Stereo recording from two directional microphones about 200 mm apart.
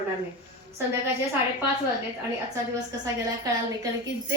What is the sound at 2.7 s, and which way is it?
Speech, 15° right (ahead or behind).